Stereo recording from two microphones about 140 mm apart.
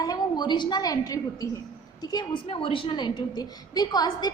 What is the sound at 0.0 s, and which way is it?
A woman's voice, 30° left (ahead or behind).